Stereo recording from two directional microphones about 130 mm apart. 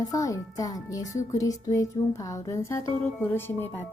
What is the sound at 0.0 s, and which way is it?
Music, 25° left (ahead or behind).